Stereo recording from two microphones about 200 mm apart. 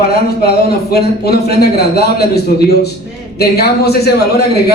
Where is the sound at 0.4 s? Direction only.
50° left (ahead or behind).